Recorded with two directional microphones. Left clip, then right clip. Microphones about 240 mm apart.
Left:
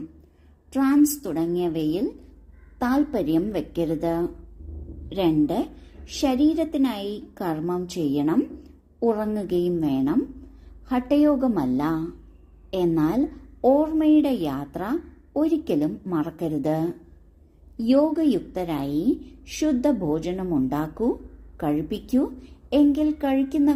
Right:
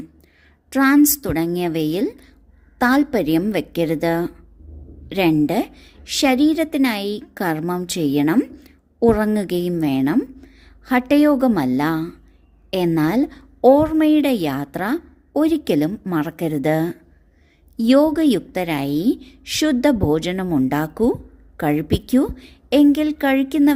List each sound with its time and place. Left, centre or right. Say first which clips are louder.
0.7 s a woman's voice: right 6 dB; right